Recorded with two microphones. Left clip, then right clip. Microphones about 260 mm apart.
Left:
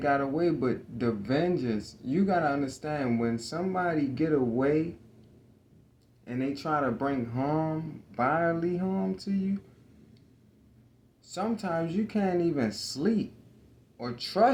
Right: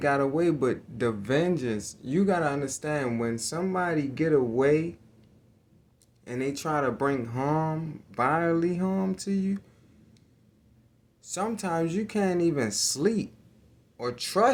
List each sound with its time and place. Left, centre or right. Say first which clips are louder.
0.0 s speech: right 2 dB; right
6.2 s speech: right 2 dB; right
11.3 s speech: right 2 dB; right